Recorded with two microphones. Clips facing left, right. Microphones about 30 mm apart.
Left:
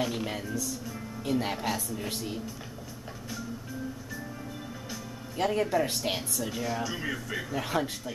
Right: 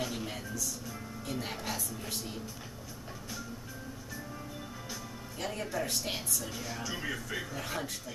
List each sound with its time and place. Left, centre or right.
0.0 s a woman's voice: centre
5.4 s a woman's voice: left
6.4 s speech: centre
7.5 s a woman's voice: centre